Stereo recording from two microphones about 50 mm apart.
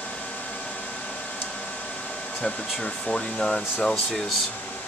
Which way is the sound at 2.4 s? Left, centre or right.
Centre.